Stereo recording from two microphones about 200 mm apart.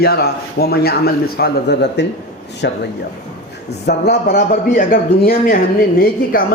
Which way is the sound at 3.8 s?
55° left (ahead or behind).